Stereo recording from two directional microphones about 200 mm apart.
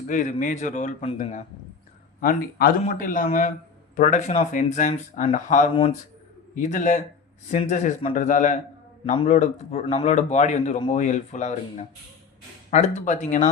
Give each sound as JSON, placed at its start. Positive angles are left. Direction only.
{"t": 0.1, "sound": "a man's voice", "side_deg": 40}